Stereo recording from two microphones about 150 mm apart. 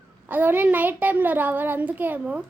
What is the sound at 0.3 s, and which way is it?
Speech, 10° right (ahead or behind).